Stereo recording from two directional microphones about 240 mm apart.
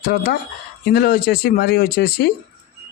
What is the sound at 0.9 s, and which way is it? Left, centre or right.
Speech, left.